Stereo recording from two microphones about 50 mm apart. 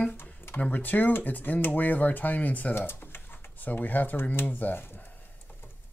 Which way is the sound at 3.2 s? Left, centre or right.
Left.